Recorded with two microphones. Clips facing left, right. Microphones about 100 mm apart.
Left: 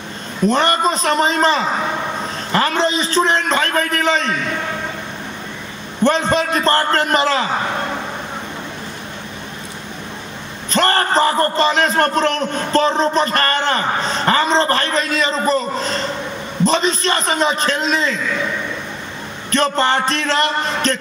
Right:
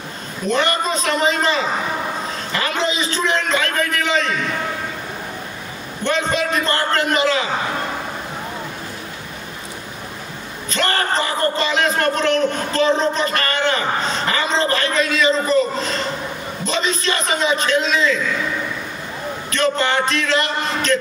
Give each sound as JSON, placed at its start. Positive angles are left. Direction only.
{"t": 0.5, "sound": "a man's voice", "side_deg": 35}
{"t": 6.0, "sound": "a man's voice", "side_deg": 35}
{"t": 10.7, "sound": "a man's voice", "side_deg": 40}
{"t": 19.5, "sound": "a man's voice", "side_deg": 35}